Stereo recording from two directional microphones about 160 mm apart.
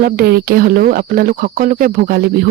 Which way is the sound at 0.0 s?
75° right (ahead or behind).